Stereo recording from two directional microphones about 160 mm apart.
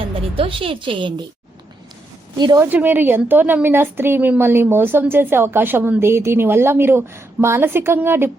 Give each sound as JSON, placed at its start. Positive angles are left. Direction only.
{"t": 0.3, "sound": "a woman's voice", "side_deg": -35}
{"t": 2.6, "sound": "a woman's voice", "side_deg": -10}